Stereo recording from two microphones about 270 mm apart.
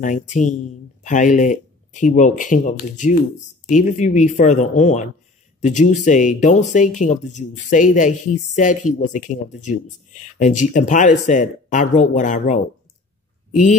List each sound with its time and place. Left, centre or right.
0.0 s speech: left